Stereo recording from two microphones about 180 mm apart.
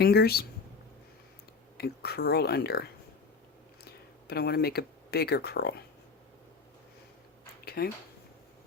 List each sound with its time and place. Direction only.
0.0 s speech: 60° left (ahead or behind)
1.8 s speech: 60° left (ahead or behind)
7.6 s a sound: 60° left (ahead or behind)